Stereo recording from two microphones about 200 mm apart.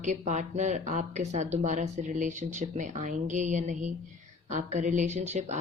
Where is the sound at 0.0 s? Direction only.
35° right (ahead or behind).